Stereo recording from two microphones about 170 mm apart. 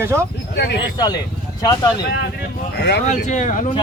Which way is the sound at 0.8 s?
25° left (ahead or behind).